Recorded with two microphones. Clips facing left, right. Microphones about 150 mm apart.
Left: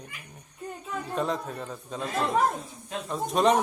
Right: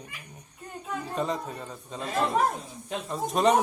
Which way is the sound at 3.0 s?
Centre (ahead or behind).